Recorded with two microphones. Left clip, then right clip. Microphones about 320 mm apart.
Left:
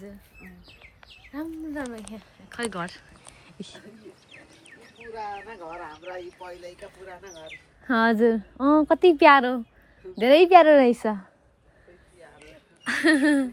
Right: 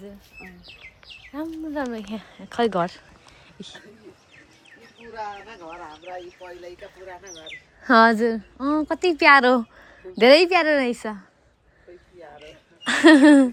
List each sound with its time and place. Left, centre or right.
1.3 s speech: centre
2.1 s speech: right
2.5 s speech: centre
5.2 s speech: left
7.9 s speech: centre
12.8 s a sound: centre
13.2 s speech: centre